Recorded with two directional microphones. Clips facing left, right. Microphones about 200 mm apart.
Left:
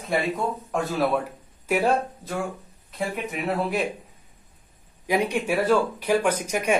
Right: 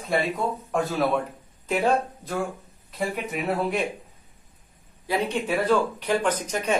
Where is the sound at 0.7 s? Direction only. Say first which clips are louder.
Even; centre (ahead or behind).